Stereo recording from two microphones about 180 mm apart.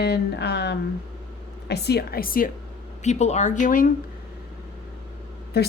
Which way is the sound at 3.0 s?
40° left (ahead or behind).